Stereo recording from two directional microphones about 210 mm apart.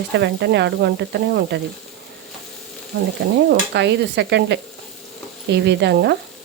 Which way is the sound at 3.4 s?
55° right (ahead or behind).